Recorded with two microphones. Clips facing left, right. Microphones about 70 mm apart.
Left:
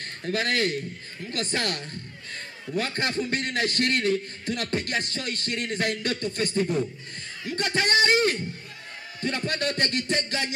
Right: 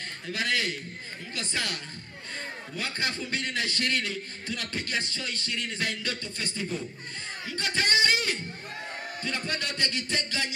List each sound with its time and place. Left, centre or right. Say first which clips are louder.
0.3 s a man's voice: left 4 dB; left